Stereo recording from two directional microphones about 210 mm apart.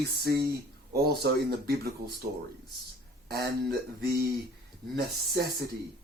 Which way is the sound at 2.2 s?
35° right (ahead or behind).